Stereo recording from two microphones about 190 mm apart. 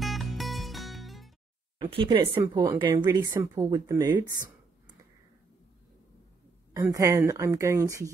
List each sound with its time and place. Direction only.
0.0 s music: centre (ahead or behind)
1.8 s speech: 25° right (ahead or behind)
6.7 s speech: 15° right (ahead or behind)